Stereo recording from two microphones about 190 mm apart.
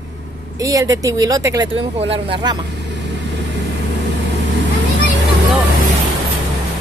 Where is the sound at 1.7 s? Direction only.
30° right (ahead or behind).